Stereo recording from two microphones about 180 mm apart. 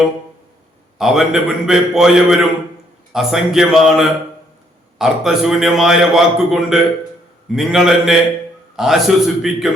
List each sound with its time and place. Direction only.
0.9 s a man's voice: 5° right (ahead or behind)